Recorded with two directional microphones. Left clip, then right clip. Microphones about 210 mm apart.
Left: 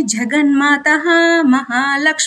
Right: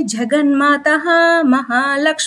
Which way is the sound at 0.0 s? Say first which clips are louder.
Even; 45° right (ahead or behind).